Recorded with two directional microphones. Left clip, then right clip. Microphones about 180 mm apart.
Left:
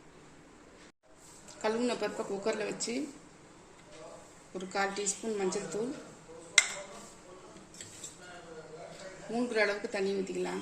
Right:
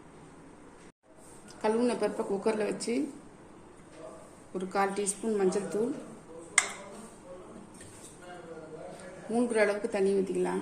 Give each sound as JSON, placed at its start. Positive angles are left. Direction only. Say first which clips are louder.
{"t": 1.6, "sound": "a woman's voice", "louder": "right 4 dB", "side_deg": 0}
{"t": 4.5, "sound": "a woman's voice", "louder": "right 4 dB", "side_deg": 0}
{"t": 9.3, "sound": "a woman's voice", "louder": "right 3 dB", "side_deg": 0}